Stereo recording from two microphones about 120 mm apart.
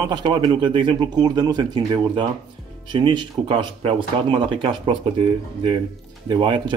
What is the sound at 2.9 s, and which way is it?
Speech, 40° right (ahead or behind).